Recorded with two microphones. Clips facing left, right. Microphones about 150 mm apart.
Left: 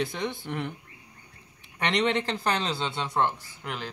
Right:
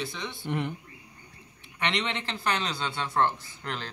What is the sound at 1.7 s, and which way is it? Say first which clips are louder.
Speech: left 5 dB; 40° left (ahead or behind).